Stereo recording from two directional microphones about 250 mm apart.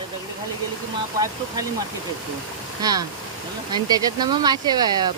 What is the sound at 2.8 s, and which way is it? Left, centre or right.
Speech, centre.